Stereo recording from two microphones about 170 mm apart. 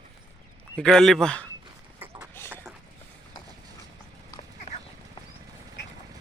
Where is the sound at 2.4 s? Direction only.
15° left (ahead or behind).